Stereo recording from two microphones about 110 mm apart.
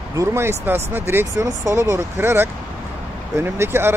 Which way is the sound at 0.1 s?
25° right (ahead or behind).